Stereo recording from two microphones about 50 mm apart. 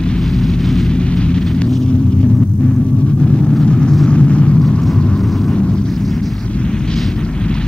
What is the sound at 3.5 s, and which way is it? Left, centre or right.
Vehicle, centre.